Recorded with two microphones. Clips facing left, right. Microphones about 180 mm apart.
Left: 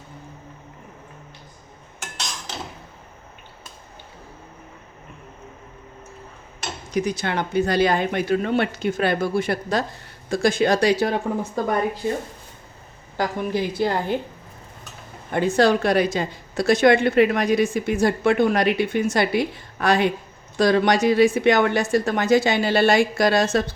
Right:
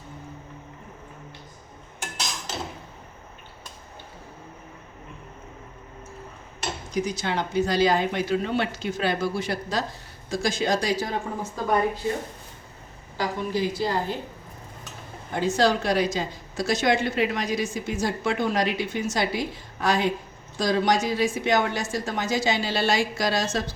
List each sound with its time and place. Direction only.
6.9 s a woman's voice: 60° left (ahead or behind)
13.1 s a woman's voice: 60° left (ahead or behind)
15.3 s a woman's voice: 60° left (ahead or behind)